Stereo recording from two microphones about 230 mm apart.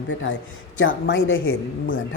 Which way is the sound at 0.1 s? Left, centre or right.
Left.